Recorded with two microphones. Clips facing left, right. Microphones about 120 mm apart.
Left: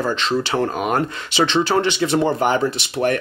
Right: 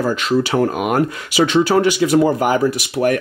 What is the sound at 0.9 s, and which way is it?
Speech, 30° left (ahead or behind).